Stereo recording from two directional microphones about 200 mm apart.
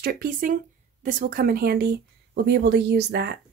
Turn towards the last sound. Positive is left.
turn(degrees=-55)  # may be behind; listen again after turning